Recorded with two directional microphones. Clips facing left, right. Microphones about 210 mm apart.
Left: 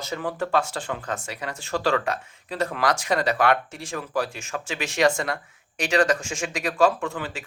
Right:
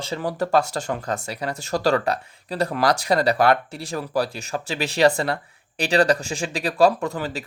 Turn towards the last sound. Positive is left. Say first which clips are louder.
# right 4 dB
turn(degrees=-40)  # may be behind; listen again after turning